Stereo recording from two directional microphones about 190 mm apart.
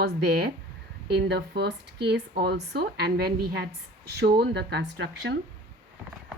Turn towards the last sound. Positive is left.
turn(degrees=-60)  # may be behind; listen again after turning